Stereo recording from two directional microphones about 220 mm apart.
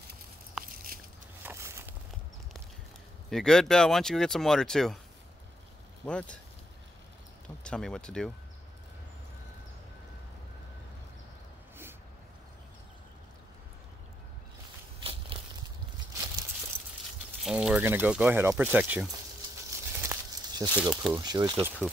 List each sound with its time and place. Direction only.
0.6 s a sound: 5° right (ahead or behind)
3.3 s speech: centre (ahead or behind)
6.0 s speech: 5° left (ahead or behind)
7.6 s speech: 5° left (ahead or behind)
15.0 s crushing: 25° right (ahead or behind)
16.7 s a sound: 10° right (ahead or behind)
17.4 s speech: centre (ahead or behind)
20.0 s snake: 15° right (ahead or behind)
20.8 s speech: 5° right (ahead or behind)
21.2 s speech: 20° right (ahead or behind)